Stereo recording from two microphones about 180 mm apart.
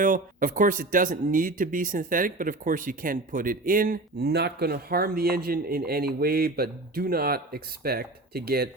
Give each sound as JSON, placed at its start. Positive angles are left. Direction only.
{"t": 0.0, "sound": "speech", "side_deg": -50}